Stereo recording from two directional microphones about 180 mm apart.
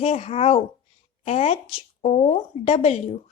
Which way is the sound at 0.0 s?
35° left (ahead or behind).